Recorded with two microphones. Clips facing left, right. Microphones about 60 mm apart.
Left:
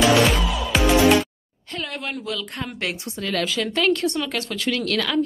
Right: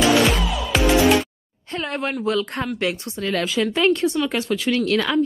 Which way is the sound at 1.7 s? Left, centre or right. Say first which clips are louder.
Right 5 dB; right.